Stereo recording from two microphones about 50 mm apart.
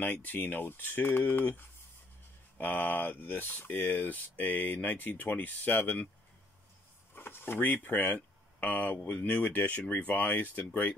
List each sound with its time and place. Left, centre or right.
0.0 s speech: left
2.5 s speech: left
7.2 s speech: left